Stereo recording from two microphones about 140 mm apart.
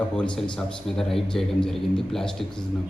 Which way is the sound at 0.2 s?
5° left (ahead or behind).